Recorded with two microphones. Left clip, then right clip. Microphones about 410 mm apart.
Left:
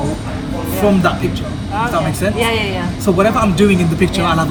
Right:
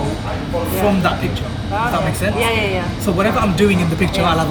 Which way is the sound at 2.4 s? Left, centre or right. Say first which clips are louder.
Left 1 dB; centre.